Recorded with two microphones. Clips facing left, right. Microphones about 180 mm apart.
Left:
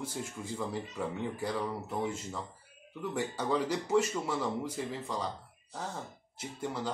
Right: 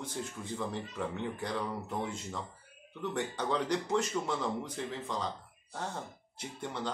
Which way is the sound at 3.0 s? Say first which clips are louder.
Even; 5° left (ahead or behind).